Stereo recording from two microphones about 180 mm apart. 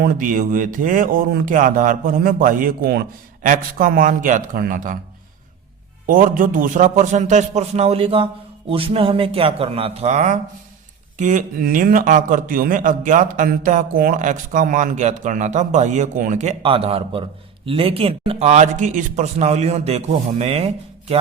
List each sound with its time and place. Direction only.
0.0 s a man's voice: 45° right (ahead or behind)
6.1 s a man's voice: 45° right (ahead or behind)